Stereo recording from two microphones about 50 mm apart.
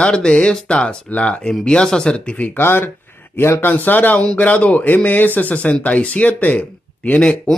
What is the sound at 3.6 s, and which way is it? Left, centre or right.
Speech, left.